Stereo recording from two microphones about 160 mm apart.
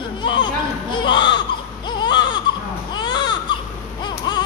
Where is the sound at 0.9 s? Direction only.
30° left (ahead or behind).